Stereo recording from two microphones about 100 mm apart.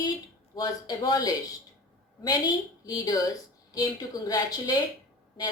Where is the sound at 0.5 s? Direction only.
45° left (ahead or behind).